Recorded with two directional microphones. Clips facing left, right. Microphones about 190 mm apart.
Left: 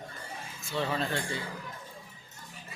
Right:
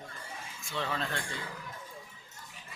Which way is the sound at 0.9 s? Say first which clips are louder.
Left 4 dB; 5° left (ahead or behind).